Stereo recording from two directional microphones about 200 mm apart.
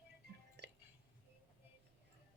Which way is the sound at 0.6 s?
60° right (ahead or behind).